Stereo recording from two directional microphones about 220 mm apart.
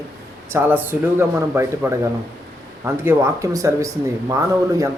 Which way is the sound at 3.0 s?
15° right (ahead or behind).